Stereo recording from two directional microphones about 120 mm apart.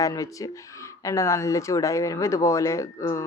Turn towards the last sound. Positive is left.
turn(degrees=25)  # may be behind; listen again after turning